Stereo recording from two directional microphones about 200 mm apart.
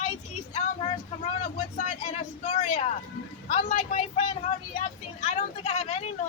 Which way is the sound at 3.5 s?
40° left (ahead or behind).